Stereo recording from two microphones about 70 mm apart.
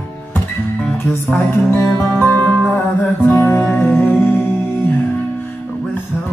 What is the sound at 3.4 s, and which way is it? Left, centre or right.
Music, left.